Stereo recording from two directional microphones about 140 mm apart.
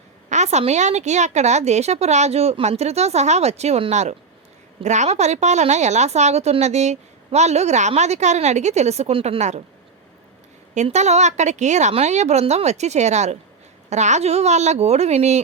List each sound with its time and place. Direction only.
0.3 s a woman's voice: 55° right (ahead or behind)
10.8 s a woman's voice: 50° right (ahead or behind)